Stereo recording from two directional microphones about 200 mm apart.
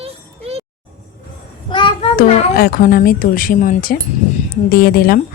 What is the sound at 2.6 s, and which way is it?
Speech, 45° left (ahead or behind).